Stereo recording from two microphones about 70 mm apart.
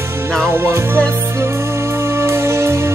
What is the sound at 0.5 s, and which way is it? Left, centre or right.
Music, right.